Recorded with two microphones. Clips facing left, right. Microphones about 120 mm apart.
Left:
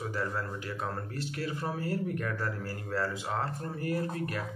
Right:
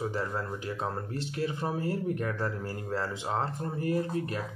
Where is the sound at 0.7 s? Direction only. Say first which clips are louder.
Right 2 dB; 25° right (ahead or behind).